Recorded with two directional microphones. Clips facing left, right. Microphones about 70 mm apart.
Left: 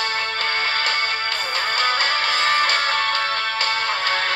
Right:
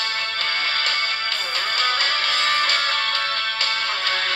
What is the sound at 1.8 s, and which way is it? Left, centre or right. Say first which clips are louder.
Music: left 2 dB; left.